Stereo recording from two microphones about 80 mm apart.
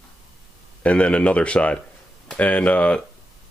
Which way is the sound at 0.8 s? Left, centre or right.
Centre.